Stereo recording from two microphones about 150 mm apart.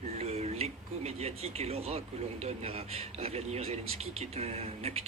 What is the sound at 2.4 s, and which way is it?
Speech, 40° right (ahead or behind).